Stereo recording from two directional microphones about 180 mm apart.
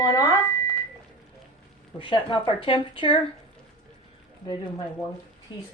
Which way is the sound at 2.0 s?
25° left (ahead or behind).